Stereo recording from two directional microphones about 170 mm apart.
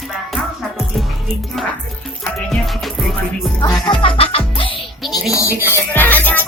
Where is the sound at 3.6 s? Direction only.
25° left (ahead or behind).